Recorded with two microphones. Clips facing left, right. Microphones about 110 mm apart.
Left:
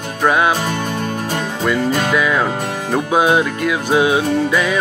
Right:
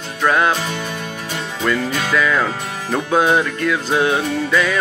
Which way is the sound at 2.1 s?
15° left (ahead or behind).